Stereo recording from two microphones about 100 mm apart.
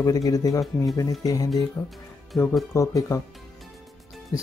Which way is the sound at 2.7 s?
30° left (ahead or behind).